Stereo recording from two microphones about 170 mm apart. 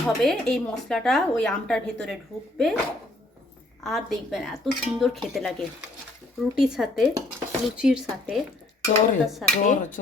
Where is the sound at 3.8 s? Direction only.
Centre (ahead or behind).